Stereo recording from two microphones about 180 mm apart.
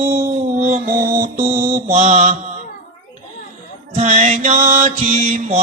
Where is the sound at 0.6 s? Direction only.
55° right (ahead or behind).